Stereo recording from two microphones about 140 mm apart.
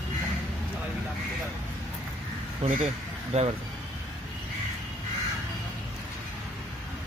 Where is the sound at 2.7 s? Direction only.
50° right (ahead or behind).